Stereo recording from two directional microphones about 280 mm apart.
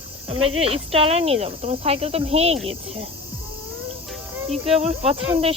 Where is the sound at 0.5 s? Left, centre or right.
Right.